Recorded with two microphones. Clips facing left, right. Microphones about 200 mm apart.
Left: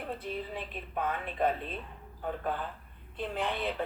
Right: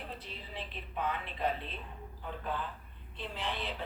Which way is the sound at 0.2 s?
50° left (ahead or behind).